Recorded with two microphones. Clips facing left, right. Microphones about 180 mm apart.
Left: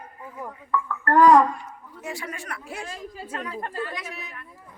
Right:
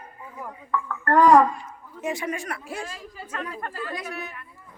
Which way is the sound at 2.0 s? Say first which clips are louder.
Right 6 dB; 20° right (ahead or behind).